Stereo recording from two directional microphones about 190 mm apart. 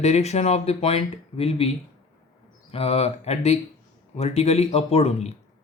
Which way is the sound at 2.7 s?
30° left (ahead or behind).